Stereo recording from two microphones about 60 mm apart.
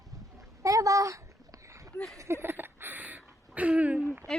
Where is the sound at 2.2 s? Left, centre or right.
Right.